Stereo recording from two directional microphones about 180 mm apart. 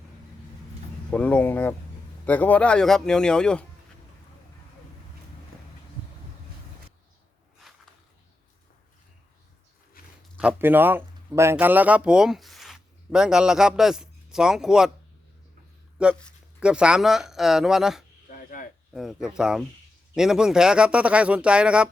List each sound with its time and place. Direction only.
1.1 s speech: 10° left (ahead or behind)
10.0 s a sound: 55° left (ahead or behind)
10.3 s speech: 10° right (ahead or behind)
16.0 s speech: 5° right (ahead or behind)
18.3 s cricket: 50° left (ahead or behind)
18.9 s speech: 5° right (ahead or behind)